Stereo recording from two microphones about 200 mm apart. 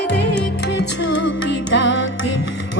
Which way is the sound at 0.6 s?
60° left (ahead or behind).